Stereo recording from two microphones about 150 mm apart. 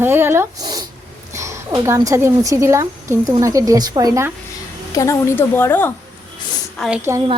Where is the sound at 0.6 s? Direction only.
25° right (ahead or behind).